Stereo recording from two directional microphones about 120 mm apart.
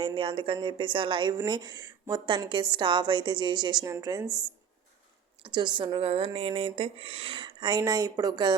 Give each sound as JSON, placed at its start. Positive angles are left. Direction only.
{"t": 0.0, "sound": "a woman's voice", "side_deg": -45}
{"t": 5.4, "sound": "a woman's voice", "side_deg": -40}